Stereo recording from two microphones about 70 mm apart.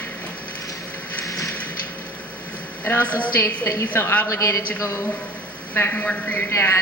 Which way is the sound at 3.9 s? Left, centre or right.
Left.